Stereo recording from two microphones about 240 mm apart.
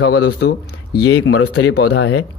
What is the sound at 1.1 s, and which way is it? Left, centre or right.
Speech, left.